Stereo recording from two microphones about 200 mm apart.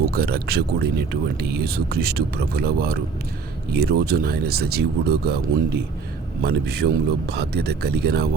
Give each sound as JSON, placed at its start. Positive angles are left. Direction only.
{"t": 0.0, "sound": "speech", "side_deg": -50}